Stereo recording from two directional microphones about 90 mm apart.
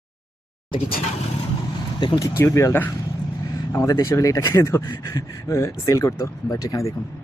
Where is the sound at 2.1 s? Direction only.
35° left (ahead or behind).